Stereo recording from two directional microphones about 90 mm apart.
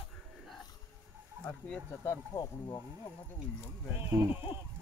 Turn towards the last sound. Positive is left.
turn(degrees=-40)  # may be behind; listen again after turning